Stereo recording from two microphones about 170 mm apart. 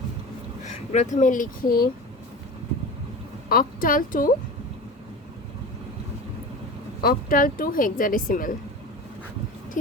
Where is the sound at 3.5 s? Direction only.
55° left (ahead or behind).